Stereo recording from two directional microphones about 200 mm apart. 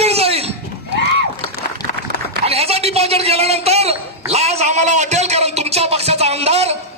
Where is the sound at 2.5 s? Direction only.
30° right (ahead or behind).